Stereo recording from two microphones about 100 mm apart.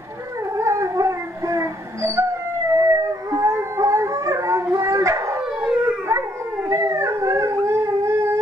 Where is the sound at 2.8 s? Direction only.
30° right (ahead or behind).